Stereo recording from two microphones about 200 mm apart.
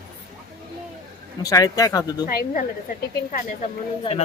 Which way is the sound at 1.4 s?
15° left (ahead or behind).